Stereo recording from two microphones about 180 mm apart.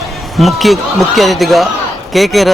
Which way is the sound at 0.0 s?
Centre (ahead or behind).